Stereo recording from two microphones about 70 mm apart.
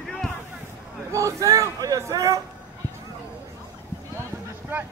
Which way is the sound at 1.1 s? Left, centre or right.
Right.